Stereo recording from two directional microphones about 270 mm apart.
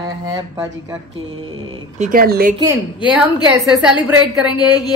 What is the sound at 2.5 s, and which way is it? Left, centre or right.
Speech, centre.